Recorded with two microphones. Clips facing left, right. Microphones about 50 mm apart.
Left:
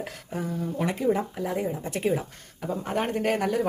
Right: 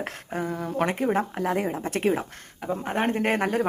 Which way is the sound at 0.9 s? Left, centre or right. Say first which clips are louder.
Left 2 dB; right.